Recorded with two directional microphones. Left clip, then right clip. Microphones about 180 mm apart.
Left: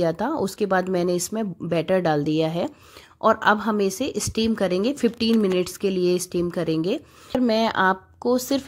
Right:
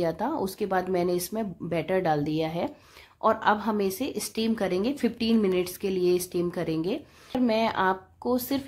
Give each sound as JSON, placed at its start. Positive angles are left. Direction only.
{"t": 0.0, "sound": "a woman's voice", "side_deg": 30}